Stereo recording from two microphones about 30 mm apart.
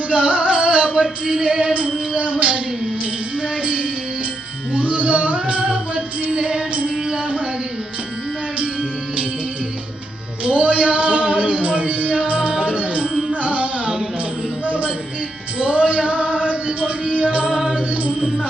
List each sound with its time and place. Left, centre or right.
0.1 s music: right
1.3 s music: right
1.7 s child singing: right
3.6 s music: right
10.4 s a sound: right
12.3 s music: right
15.5 s male singing: right
16.8 s music: right